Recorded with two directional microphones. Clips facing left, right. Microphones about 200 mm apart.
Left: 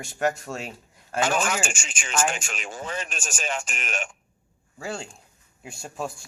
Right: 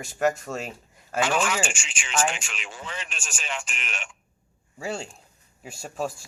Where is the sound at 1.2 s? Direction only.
45° left (ahead or behind).